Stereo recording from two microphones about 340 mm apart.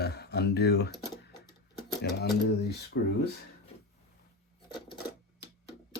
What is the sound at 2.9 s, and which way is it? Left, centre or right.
Speech, left.